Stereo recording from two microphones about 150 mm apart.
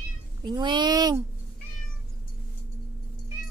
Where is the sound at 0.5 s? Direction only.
30° right (ahead or behind).